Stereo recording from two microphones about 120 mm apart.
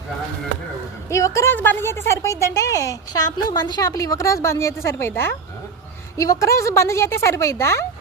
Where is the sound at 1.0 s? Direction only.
25° left (ahead or behind).